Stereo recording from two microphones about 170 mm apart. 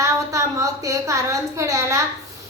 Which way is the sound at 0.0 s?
20° right (ahead or behind).